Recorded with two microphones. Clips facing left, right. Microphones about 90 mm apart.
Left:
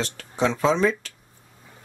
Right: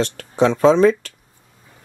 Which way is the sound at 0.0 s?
55° right (ahead or behind).